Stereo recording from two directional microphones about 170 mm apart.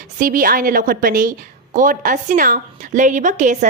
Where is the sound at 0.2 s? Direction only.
55° right (ahead or behind).